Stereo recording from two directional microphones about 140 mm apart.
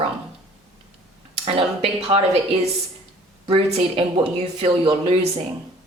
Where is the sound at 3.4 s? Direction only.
40° right (ahead or behind).